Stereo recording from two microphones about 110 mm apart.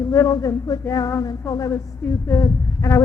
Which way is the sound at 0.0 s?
30° left (ahead or behind).